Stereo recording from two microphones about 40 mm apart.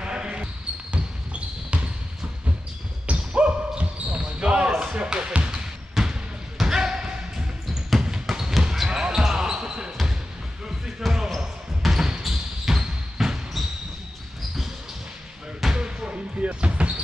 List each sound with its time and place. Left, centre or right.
0.0 s basketball bounce: right
3.1 s basketball bounce: right
4.6 s basketball bounce: centre
4.9 s basketball bounce: right
6.0 s basketball bounce: centre
6.6 s basketball bounce: centre
11.0 s basketball bounce: centre
15.7 s basketball bounce: right